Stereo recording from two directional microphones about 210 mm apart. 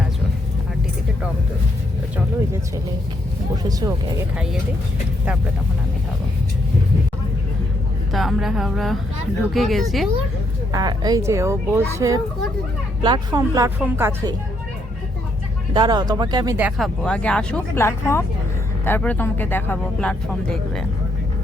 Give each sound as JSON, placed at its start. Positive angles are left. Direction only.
{"t": 3.6, "sound": "speech", "side_deg": -15}
{"t": 8.1, "sound": "a woman's voice", "side_deg": 0}
{"t": 10.7, "sound": "speech", "side_deg": -20}
{"t": 15.7, "sound": "speech", "side_deg": -20}